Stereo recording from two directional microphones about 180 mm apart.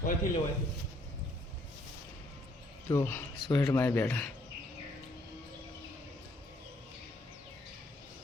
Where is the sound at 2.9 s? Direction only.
15° left (ahead or behind).